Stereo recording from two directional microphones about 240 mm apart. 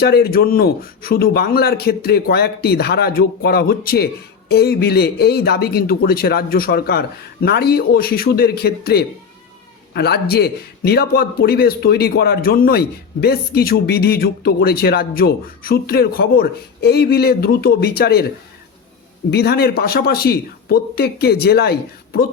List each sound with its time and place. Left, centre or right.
0.0 s a man's voice: left
19.3 s a man's voice: left